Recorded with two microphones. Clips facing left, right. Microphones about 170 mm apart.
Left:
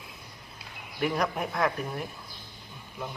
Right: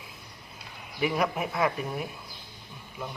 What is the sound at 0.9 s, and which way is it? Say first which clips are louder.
Speech: right 1 dB; 5° right (ahead or behind).